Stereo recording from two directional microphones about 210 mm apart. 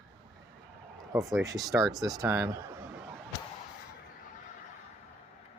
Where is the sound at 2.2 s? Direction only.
15° right (ahead or behind).